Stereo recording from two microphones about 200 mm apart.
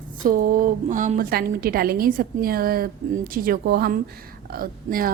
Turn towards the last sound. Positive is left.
turn(degrees=-45)  # may be behind; listen again after turning